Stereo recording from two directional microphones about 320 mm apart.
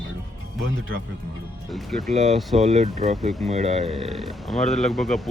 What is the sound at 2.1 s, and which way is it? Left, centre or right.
Speech, right.